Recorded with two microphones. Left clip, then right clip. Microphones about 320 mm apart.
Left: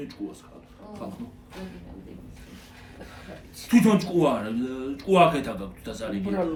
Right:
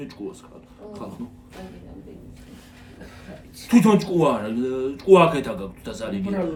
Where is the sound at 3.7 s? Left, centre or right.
Centre.